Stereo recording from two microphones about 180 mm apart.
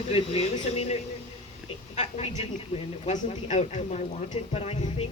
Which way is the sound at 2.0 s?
35° left (ahead or behind).